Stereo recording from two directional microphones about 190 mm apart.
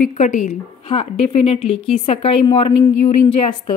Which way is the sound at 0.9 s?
30° left (ahead or behind).